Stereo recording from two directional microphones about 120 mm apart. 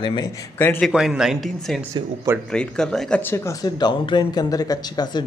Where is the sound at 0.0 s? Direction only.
40° left (ahead or behind).